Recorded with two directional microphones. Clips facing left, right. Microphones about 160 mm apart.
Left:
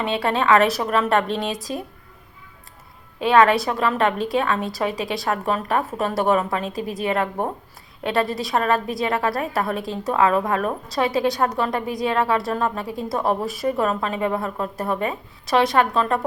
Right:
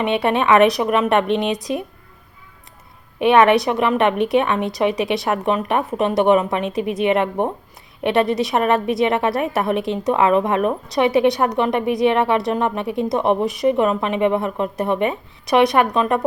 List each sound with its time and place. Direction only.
0.0 s a woman's voice: 20° right (ahead or behind)
3.2 s a woman's voice: 20° right (ahead or behind)